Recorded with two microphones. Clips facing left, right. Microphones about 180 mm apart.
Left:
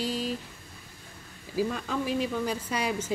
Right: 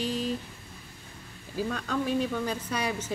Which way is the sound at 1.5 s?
5° left (ahead or behind).